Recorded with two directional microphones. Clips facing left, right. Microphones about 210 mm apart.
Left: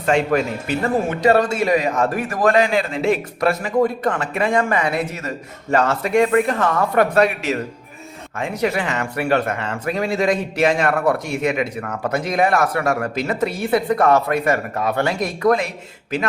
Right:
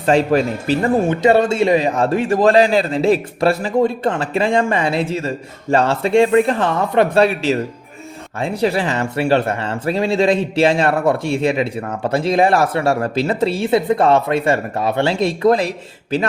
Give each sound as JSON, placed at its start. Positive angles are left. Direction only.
{"t": 0.0, "sound": "speech", "side_deg": -35}